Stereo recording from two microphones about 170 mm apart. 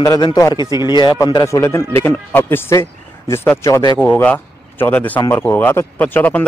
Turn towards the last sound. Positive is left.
turn(degrees=10)  # may be behind; listen again after turning